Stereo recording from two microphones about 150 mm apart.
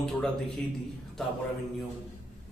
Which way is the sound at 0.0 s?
5° left (ahead or behind).